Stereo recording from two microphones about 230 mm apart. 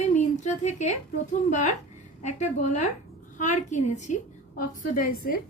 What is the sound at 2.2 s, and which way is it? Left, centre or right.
A woman's voice, left.